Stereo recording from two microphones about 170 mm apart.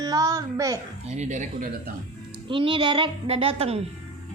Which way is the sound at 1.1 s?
45° right (ahead or behind).